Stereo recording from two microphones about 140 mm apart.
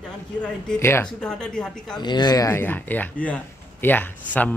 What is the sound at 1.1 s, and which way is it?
Speech, 5° left (ahead or behind).